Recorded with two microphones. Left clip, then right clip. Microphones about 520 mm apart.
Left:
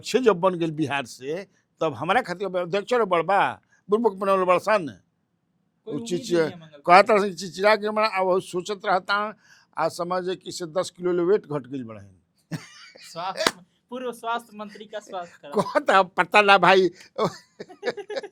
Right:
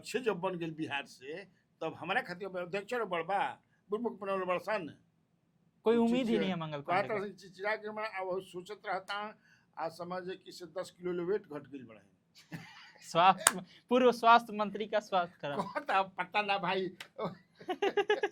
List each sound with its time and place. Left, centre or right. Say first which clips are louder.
0.0 s a man's voice: left 14 dB; left
6.1 s speech: left 9 dB; left
6.5 s speech: right 5 dB; right
6.8 s speech: left 18 dB; left
12.5 s cough: left 10 dB; left
13.1 s speech: even; right
15.5 s speech: left 13 dB; left
17.7 s speech: left 1 dB; right